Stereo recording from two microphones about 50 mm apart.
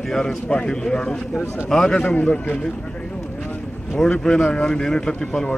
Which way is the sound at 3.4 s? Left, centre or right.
Centre.